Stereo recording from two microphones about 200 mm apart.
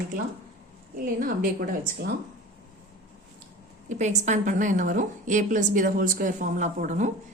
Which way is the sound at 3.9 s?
35° right (ahead or behind).